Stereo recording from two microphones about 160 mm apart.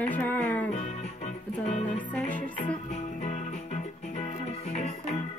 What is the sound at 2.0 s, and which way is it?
Music, 10° left (ahead or behind).